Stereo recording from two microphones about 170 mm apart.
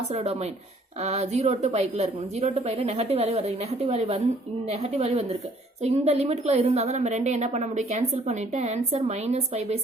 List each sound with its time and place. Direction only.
0.1 s a woman's voice: 40° right (ahead or behind)